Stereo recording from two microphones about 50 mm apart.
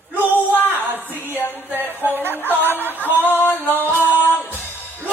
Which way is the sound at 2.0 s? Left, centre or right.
Right.